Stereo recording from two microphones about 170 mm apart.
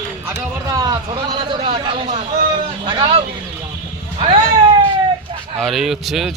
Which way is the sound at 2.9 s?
30° right (ahead or behind).